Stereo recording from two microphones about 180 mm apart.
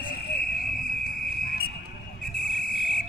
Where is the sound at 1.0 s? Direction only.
55° left (ahead or behind).